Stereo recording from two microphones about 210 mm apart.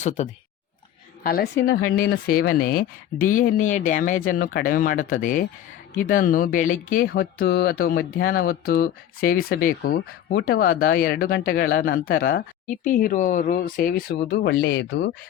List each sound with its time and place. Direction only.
0.0 s speech: 35° left (ahead or behind)
1.3 s speech: 45° left (ahead or behind)